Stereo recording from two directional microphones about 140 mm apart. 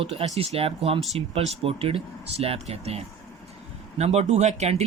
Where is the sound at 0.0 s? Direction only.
45° right (ahead or behind).